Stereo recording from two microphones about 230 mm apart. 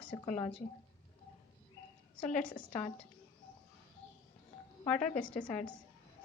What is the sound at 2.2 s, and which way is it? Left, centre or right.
Speech, centre.